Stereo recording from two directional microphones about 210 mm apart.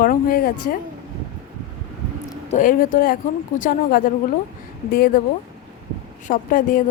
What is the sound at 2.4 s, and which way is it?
A woman's voice, 40° left (ahead or behind).